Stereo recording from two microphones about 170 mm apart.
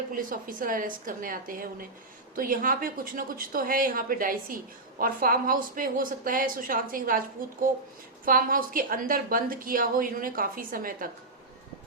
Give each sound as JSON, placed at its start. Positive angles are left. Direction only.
{"t": 0.1, "sound": "speech", "side_deg": -55}
{"t": 8.2, "sound": "speech", "side_deg": -55}